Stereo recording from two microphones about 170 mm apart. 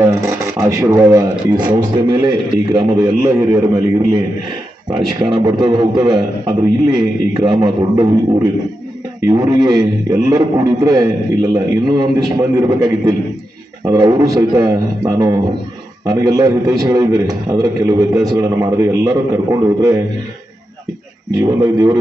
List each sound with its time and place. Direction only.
0.0 s speech: 20° right (ahead or behind)
21.3 s speech: 20° right (ahead or behind)